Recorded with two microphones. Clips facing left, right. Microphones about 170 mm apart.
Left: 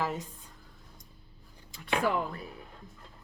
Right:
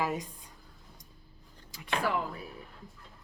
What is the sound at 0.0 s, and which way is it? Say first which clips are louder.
Speech: right 1 dB; 15° right (ahead or behind).